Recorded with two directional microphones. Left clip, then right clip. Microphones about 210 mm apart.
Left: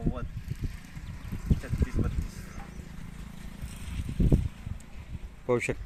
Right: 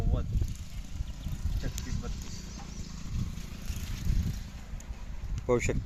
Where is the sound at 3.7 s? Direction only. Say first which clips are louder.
Right 1 dB; 50° right (ahead or behind).